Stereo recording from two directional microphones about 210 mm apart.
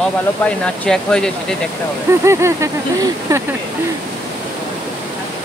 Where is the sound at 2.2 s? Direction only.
15° right (ahead or behind).